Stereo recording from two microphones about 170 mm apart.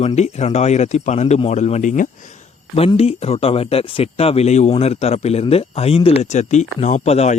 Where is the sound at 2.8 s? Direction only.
35° left (ahead or behind).